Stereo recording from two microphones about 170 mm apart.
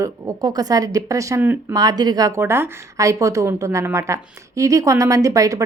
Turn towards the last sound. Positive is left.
turn(degrees=-20)  # may be behind; listen again after turning